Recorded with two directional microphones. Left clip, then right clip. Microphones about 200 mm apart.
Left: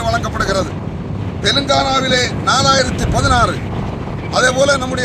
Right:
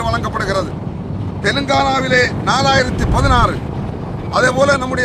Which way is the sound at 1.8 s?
20° right (ahead or behind).